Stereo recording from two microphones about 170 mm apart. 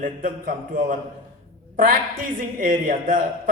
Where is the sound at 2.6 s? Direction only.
50° right (ahead or behind).